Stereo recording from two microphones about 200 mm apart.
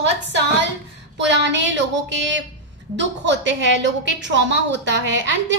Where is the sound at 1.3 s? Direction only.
65° right (ahead or behind).